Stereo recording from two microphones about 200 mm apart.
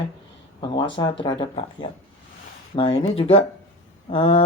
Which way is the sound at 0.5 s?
25° left (ahead or behind).